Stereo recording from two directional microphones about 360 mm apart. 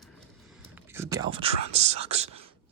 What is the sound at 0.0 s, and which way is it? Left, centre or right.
Whispering, centre.